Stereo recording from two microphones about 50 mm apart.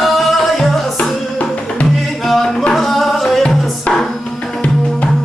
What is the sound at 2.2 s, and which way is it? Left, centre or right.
Music, centre.